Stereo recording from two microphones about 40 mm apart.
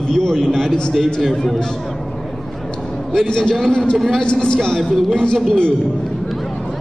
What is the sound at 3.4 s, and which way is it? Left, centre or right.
Speech, centre.